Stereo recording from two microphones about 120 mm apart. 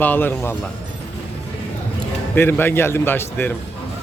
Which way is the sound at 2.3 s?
20° left (ahead or behind).